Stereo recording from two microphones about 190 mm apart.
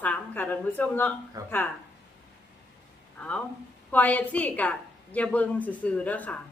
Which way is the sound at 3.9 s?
10° left (ahead or behind).